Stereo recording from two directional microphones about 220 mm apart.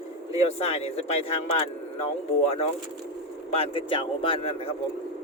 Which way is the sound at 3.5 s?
25° left (ahead or behind).